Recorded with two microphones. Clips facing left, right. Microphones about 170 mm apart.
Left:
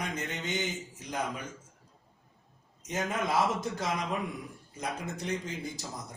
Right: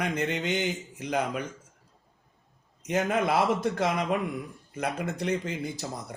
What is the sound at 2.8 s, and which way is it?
A man's voice, 65° right (ahead or behind).